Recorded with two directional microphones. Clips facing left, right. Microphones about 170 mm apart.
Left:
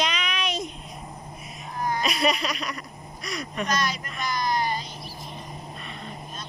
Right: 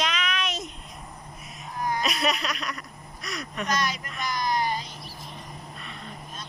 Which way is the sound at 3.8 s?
20° right (ahead or behind).